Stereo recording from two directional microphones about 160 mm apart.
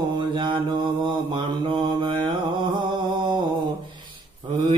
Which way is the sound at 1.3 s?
30° right (ahead or behind).